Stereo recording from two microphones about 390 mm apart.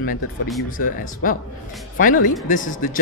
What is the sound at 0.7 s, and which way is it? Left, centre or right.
Speech, left.